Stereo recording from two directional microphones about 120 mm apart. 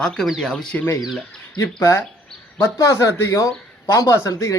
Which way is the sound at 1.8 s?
25° left (ahead or behind).